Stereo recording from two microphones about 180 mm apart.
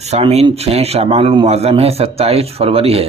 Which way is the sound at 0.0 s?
35° right (ahead or behind).